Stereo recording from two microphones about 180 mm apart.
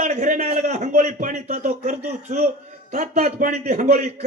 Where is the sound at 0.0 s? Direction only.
45° right (ahead or behind).